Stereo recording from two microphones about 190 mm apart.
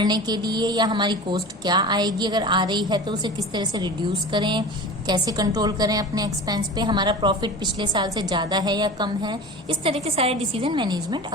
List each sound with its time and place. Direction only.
0.0 s a woman's voice: 20° right (ahead or behind)